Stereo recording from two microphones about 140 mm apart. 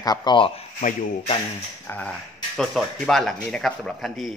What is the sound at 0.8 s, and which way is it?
Speech, 60° left (ahead or behind).